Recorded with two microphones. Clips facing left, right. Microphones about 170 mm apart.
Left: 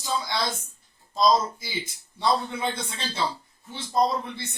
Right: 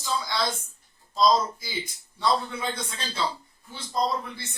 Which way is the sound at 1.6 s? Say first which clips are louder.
Even; 25° left (ahead or behind).